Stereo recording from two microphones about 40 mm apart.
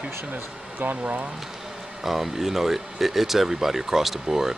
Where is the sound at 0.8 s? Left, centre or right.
Right.